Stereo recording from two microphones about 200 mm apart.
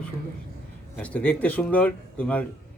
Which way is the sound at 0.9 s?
5° left (ahead or behind).